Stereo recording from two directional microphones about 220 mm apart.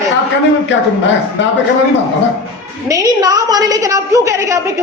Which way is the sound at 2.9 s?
15° right (ahead or behind).